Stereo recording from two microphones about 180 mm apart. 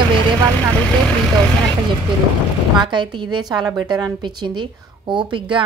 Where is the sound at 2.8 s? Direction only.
25° right (ahead or behind).